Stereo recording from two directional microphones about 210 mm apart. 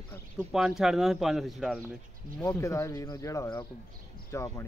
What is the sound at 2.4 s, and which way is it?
Speech, 15° left (ahead or behind).